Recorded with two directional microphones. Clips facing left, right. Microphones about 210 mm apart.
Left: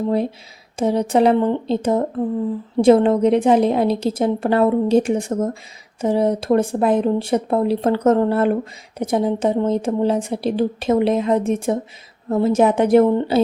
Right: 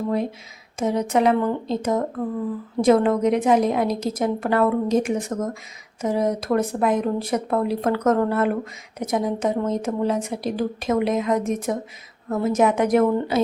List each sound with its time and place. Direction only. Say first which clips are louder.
0.1 s speech: left 4 dB; 30° left (ahead or behind)